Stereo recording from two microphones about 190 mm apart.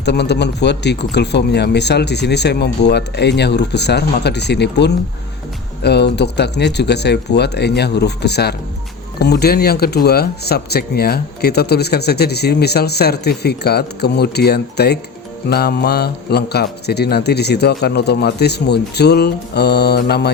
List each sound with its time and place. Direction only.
0.0 s speech: 60° left (ahead or behind)